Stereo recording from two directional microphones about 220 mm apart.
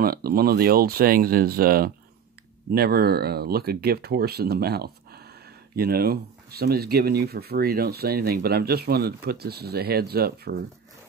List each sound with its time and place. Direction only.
0.0 s speech: 40° right (ahead or behind)